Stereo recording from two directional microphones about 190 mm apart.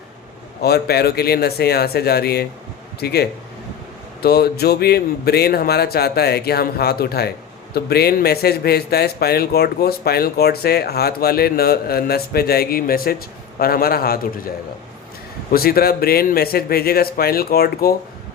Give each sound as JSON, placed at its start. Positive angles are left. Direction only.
{"t": 0.6, "sound": "a man's voice", "side_deg": 55}
{"t": 15.5, "sound": "a man's voice", "side_deg": 50}